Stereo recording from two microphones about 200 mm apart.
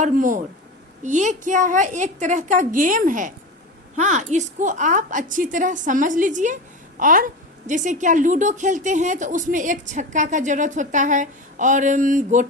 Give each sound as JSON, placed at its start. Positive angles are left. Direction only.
{"t": 0.0, "sound": "a woman's voice", "side_deg": -40}